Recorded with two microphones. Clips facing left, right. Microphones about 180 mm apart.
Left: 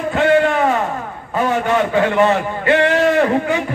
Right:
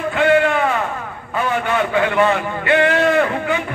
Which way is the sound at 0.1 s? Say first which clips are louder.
Left 1 dB; 40° left (ahead or behind).